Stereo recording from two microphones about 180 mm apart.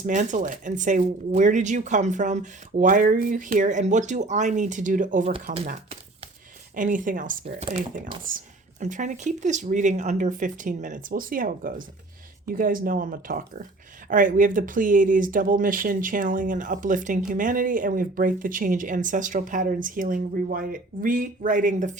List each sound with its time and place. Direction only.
0.0 s speech: 45° right (ahead or behind)
5.3 s speech: 35° right (ahead or behind)